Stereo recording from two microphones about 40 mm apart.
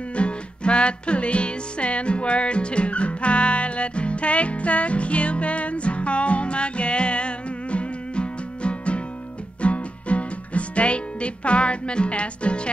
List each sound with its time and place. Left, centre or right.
0.1 s music: left